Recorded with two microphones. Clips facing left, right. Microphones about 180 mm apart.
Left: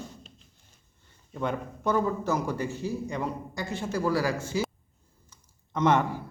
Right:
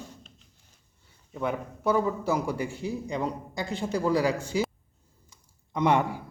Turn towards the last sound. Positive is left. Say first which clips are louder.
# even
turn(degrees=-15)  # may be behind; listen again after turning